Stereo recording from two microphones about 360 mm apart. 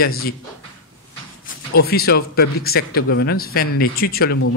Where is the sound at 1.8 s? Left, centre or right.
Left.